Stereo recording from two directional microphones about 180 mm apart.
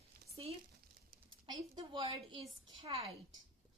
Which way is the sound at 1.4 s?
25° right (ahead or behind).